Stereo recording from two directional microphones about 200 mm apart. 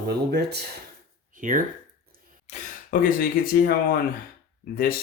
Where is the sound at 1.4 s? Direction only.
40° right (ahead or behind).